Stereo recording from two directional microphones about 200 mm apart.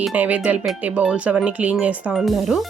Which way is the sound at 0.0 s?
5° right (ahead or behind).